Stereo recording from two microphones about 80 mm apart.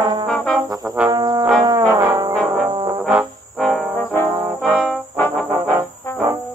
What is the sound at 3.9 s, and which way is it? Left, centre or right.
Trombone, left.